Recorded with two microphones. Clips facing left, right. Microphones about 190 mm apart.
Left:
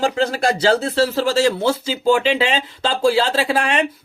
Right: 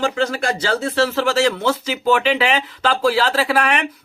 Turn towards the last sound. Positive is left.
turn(degrees=25)  # may be behind; listen again after turning